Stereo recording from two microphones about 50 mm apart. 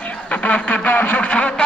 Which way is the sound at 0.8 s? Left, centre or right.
Left.